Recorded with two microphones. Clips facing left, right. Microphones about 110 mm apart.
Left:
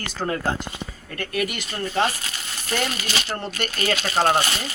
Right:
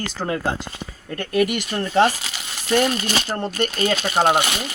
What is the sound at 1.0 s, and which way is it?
Speech, 30° right (ahead or behind).